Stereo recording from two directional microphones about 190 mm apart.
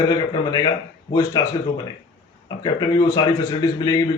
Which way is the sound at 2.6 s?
20° left (ahead or behind).